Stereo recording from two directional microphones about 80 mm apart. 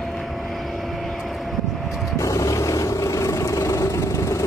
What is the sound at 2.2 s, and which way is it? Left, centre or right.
Vehicle, left.